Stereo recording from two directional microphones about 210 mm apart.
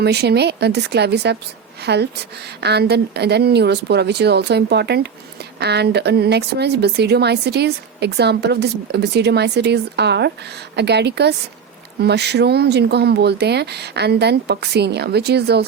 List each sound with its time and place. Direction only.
0.0 s a woman's voice: 50° right (ahead or behind)